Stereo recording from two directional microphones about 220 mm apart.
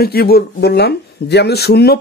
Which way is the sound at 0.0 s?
45° left (ahead or behind).